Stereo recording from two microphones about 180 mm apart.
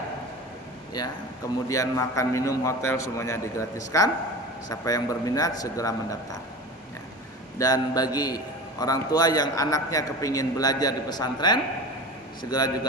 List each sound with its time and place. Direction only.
1.6 s a man's voice: 15° left (ahead or behind)
7.6 s a man's voice: 20° left (ahead or behind)